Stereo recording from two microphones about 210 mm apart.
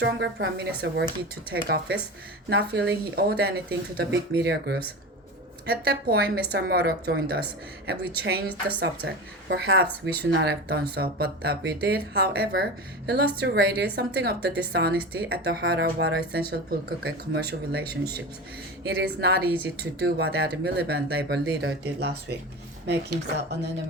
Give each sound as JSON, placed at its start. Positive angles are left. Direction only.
{"t": 0.0, "sound": "a woman's voice", "side_deg": -50}